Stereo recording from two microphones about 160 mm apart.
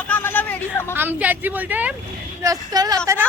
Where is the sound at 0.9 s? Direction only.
10° right (ahead or behind).